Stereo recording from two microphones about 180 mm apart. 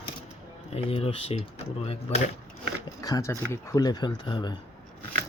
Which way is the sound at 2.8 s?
20° left (ahead or behind).